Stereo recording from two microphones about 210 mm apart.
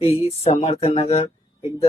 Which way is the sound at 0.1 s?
30° left (ahead or behind).